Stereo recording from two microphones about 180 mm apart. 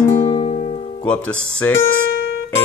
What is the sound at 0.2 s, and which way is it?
Music, 35° left (ahead or behind).